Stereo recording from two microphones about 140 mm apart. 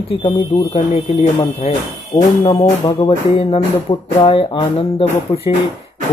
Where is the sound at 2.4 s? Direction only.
40° left (ahead or behind).